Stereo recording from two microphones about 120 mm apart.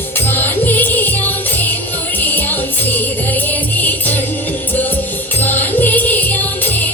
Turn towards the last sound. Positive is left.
turn(degrees=15)  # may be behind; listen again after turning